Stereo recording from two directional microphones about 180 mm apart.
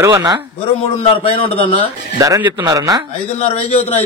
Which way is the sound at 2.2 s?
20° right (ahead or behind).